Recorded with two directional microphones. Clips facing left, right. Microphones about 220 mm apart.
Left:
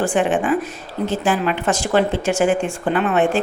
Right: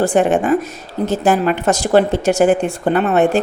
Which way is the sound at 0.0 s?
40° right (ahead or behind).